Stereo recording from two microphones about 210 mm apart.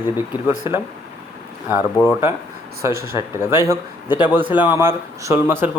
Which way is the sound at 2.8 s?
15° right (ahead or behind).